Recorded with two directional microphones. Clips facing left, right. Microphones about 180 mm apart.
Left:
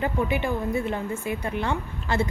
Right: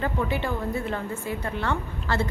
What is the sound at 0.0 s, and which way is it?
A woman's voice, 15° left (ahead or behind).